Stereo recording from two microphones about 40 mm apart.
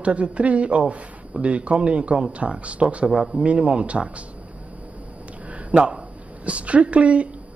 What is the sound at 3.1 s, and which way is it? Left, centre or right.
A man's voice, centre.